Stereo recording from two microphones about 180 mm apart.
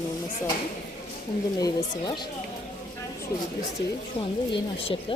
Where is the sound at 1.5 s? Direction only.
20° left (ahead or behind).